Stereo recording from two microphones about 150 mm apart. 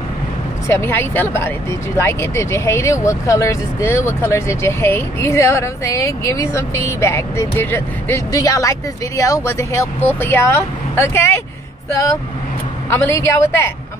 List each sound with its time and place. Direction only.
0.7 s speech: 15° left (ahead or behind)
12.9 s speech: 20° left (ahead or behind)